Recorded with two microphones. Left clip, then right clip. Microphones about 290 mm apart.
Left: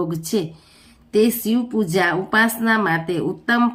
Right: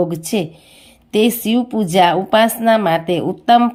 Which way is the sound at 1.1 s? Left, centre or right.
Right.